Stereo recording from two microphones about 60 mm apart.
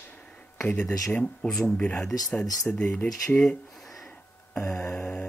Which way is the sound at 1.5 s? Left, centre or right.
Centre.